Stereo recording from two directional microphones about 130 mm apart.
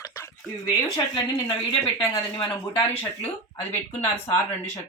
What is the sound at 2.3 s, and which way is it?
Speech, 45° left (ahead or behind).